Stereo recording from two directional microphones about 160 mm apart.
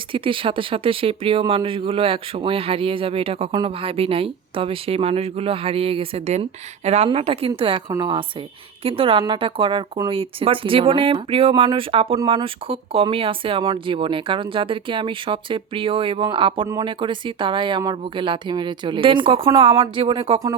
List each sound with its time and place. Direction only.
0.1 s speech: 35° right (ahead or behind)